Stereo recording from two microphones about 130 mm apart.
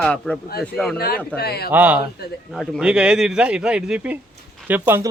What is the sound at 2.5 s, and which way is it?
Speech, 5° left (ahead or behind).